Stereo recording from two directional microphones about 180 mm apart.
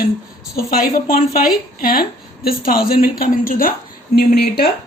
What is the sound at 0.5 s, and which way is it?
A woman's voice, 55° left (ahead or behind).